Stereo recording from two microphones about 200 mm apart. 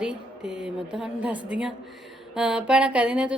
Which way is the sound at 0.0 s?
5° right (ahead or behind).